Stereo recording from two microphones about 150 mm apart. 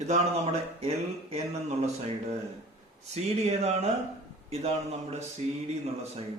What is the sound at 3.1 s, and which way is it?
Speech, 45° right (ahead or behind).